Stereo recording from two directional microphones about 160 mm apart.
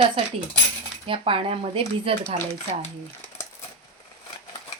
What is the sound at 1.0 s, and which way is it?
Speech, 35° right (ahead or behind).